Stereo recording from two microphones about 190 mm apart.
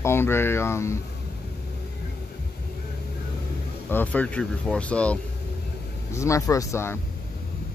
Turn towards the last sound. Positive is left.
turn(degrees=15)  # may be behind; listen again after turning